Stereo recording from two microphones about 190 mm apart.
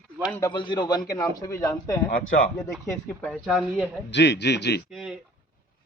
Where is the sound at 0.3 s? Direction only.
10° left (ahead or behind).